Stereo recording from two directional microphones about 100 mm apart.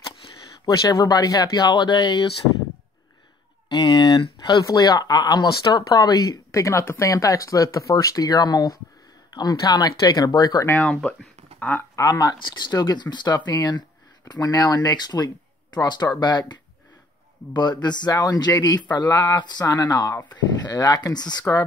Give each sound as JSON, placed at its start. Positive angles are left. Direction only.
{"t": 0.7, "sound": "speech", "side_deg": 40}
{"t": 3.6, "sound": "speech", "side_deg": 45}
{"t": 10.8, "sound": "speech", "side_deg": 10}
{"t": 11.9, "sound": "speech", "side_deg": 35}
{"t": 17.8, "sound": "speech", "side_deg": 45}